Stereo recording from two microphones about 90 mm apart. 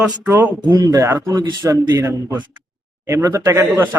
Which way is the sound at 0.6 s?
50° right (ahead or behind).